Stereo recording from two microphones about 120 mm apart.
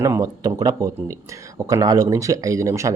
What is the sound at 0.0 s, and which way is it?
Speech, 25° right (ahead or behind).